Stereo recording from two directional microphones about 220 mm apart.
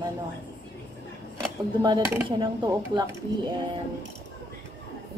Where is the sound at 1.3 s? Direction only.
20° right (ahead or behind).